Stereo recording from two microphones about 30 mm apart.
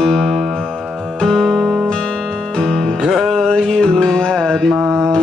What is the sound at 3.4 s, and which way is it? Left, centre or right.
Mantra, left.